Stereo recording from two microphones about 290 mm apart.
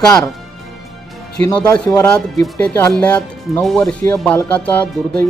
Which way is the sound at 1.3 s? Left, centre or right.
Centre.